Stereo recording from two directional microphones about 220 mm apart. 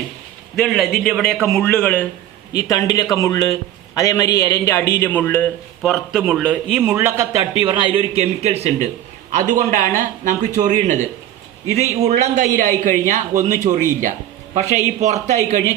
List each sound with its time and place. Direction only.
0.5 s a man's voice: centre (ahead or behind)
7.6 s a man's voice: 20° right (ahead or behind)